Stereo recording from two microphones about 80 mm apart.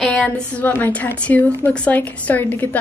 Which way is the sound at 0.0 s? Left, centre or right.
Centre.